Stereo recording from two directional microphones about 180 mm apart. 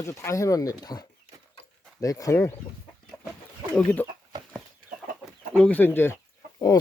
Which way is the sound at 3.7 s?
10° left (ahead or behind).